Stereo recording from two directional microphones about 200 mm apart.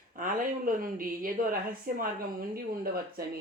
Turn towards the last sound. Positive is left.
turn(degrees=-45)  # may be behind; listen again after turning